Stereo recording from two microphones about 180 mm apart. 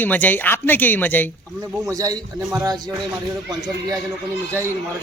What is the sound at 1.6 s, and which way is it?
A man's voice, 20° right (ahead or behind).